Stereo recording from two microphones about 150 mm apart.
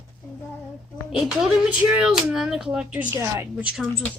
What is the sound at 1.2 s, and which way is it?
Speech, 5° right (ahead or behind).